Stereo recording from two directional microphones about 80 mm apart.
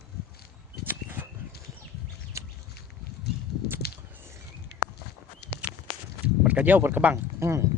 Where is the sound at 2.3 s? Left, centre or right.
Right.